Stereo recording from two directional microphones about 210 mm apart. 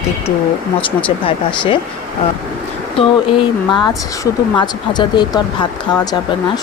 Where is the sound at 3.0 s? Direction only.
25° left (ahead or behind).